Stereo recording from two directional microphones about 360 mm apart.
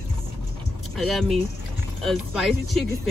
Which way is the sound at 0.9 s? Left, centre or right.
Centre.